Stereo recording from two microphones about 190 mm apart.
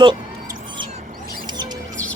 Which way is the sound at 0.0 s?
25° right (ahead or behind).